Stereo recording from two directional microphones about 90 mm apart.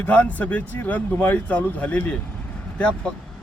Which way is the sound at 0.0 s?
20° left (ahead or behind).